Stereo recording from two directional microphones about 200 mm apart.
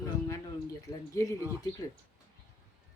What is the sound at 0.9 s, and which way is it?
Speech, 15° left (ahead or behind).